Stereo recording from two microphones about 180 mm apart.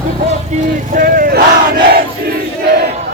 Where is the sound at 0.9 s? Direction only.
50° right (ahead or behind).